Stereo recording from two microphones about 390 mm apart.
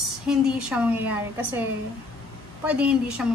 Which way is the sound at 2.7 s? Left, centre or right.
Centre.